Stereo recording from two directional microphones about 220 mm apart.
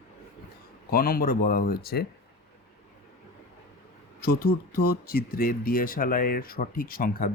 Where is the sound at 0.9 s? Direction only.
40° left (ahead or behind).